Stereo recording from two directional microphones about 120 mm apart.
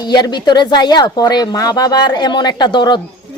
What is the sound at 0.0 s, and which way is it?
Speech, 35° left (ahead or behind).